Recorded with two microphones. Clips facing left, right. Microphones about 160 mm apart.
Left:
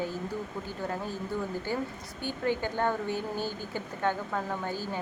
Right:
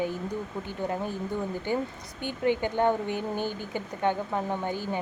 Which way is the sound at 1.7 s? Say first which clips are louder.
Right 3 dB; 20° right (ahead or behind).